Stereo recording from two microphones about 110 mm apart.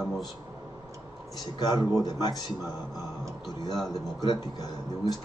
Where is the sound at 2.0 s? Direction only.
35° left (ahead or behind).